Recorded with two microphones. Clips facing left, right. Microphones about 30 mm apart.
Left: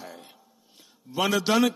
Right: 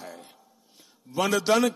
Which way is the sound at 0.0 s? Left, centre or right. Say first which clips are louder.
Right 1 dB; centre.